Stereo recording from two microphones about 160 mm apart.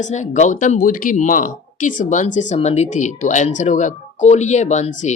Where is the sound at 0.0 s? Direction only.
50° left (ahead or behind).